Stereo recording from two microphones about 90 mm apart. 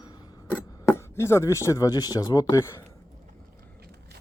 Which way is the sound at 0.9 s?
30° left (ahead or behind).